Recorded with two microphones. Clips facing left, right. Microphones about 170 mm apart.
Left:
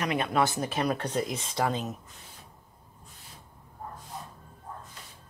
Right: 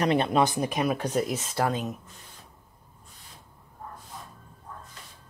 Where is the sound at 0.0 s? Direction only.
30° right (ahead or behind).